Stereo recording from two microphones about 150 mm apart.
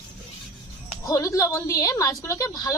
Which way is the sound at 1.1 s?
20° left (ahead or behind).